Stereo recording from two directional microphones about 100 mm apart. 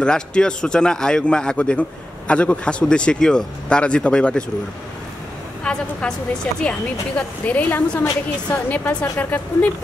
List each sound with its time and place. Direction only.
0.0 s speech: 10° left (ahead or behind)
5.6 s speech: 10° left (ahead or behind)